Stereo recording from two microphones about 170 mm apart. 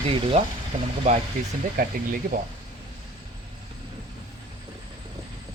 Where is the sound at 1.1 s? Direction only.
45° right (ahead or behind).